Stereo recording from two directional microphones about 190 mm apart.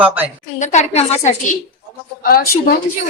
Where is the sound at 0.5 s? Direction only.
40° left (ahead or behind).